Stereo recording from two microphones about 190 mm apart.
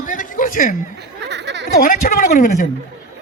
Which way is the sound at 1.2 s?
65° right (ahead or behind).